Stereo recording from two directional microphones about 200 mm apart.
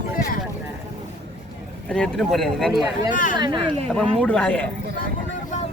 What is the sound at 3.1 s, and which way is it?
Speech, 40° left (ahead or behind).